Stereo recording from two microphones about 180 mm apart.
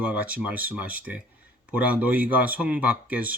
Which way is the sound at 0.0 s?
10° right (ahead or behind).